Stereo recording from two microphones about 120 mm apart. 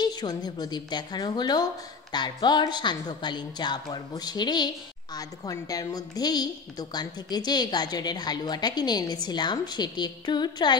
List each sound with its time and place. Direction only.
0.0 s a woman's voice: 35° left (ahead or behind)